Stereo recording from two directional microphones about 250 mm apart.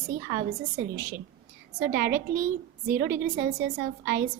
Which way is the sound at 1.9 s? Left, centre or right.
Right.